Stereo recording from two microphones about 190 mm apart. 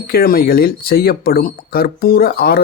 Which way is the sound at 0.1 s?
55° left (ahead or behind).